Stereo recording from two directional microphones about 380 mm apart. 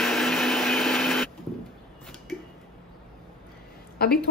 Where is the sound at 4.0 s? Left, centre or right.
Left.